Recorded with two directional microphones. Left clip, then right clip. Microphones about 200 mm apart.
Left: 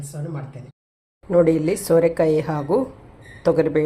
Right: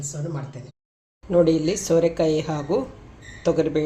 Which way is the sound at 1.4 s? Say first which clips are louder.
Left 2 dB; 55° left (ahead or behind).